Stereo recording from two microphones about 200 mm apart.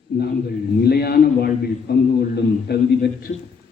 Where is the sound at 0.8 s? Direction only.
50° left (ahead or behind).